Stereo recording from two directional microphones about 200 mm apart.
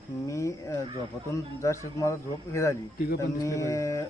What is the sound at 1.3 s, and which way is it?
A man's voice, 15° left (ahead or behind).